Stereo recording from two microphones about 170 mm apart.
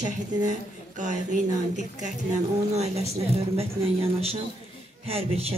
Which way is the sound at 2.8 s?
40° right (ahead or behind).